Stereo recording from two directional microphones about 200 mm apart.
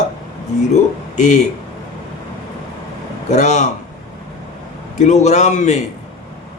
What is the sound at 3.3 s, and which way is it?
Speech, 35° left (ahead or behind).